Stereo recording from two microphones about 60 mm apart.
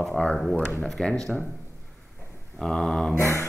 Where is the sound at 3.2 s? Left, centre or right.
Left.